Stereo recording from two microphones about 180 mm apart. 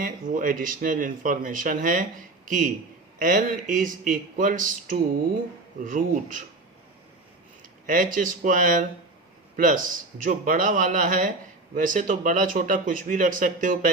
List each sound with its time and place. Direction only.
0.0 s speech: 50° right (ahead or behind)
7.6 s speech: 50° right (ahead or behind)